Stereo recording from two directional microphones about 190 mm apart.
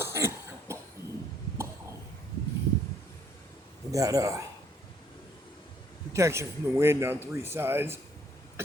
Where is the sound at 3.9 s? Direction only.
15° right (ahead or behind).